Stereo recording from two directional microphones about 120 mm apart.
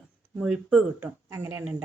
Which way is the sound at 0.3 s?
10° right (ahead or behind).